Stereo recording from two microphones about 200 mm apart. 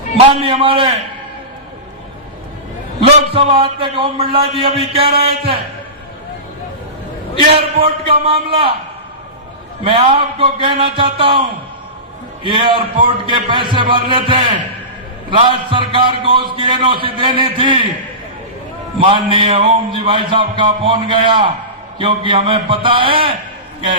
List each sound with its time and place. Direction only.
0.3 s a man's voice: 30° right (ahead or behind)
3.3 s a man's voice: 25° right (ahead or behind)
7.5 s a man's voice: 30° right (ahead or behind)
9.8 s a man's voice: 25° right (ahead or behind)
18.9 s a man's voice: 25° right (ahead or behind)